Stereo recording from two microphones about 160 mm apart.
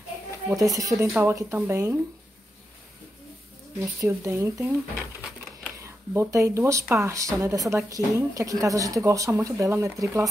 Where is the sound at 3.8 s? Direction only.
20° right (ahead or behind).